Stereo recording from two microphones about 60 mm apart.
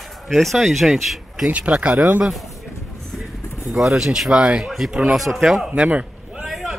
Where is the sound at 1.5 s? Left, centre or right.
Right.